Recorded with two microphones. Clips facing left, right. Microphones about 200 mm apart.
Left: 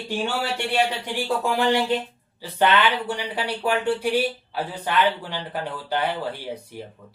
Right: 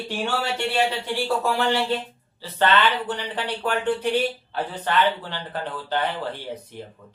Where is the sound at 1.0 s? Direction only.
15° left (ahead or behind).